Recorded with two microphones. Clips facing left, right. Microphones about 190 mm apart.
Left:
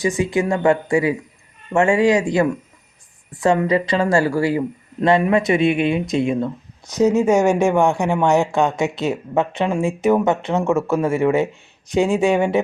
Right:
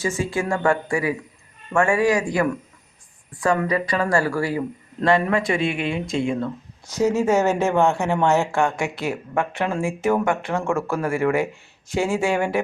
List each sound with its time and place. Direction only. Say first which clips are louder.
0.0 s speech: left 5 dB; 15° left (ahead or behind)